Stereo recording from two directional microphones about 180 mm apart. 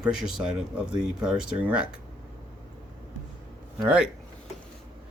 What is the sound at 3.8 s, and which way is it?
Speech, 5° right (ahead or behind).